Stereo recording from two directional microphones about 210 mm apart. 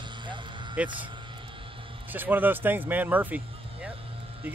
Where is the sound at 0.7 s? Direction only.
5° right (ahead or behind).